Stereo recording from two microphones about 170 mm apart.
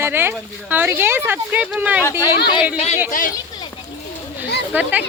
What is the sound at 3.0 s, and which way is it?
Speech, 50° left (ahead or behind).